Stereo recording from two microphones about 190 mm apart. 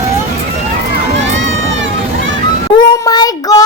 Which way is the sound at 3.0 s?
20° left (ahead or behind).